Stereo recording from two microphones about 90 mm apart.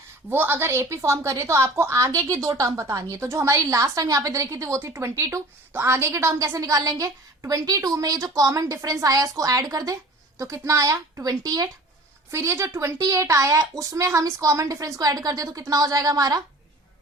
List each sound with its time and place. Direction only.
0.3 s a woman's voice: 25° right (ahead or behind); by 11.7 s 45° right (ahead or behind)
12.3 s a woman's voice: 30° right (ahead or behind)